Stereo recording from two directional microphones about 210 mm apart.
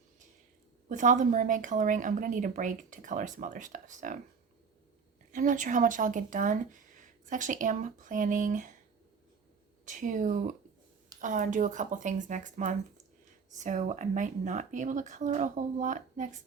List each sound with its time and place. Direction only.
0.9 s speech: 35° right (ahead or behind)
5.3 s speech: 40° right (ahead or behind)
9.8 s speech: 35° right (ahead or behind)